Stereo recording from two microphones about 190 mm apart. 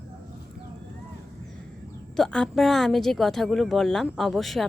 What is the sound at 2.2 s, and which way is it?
Speech, 5° left (ahead or behind).